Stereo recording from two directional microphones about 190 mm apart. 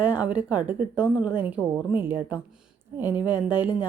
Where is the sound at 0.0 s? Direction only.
10° right (ahead or behind).